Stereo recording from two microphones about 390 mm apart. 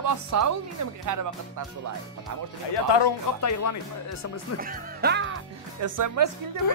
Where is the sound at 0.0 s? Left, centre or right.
Right.